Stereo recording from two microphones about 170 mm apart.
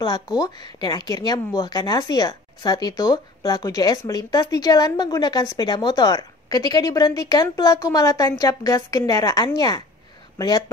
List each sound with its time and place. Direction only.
0.4 s speech: 25° left (ahead or behind)